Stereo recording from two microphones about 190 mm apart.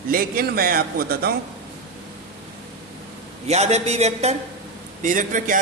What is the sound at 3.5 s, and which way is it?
A man's voice, 35° right (ahead or behind).